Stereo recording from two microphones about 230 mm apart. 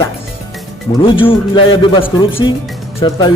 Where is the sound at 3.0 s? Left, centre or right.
Centre.